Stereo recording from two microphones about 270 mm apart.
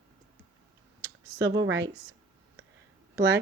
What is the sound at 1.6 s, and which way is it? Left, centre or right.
Speech, right.